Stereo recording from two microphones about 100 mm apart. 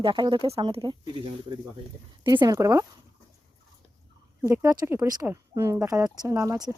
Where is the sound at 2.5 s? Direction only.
35° right (ahead or behind).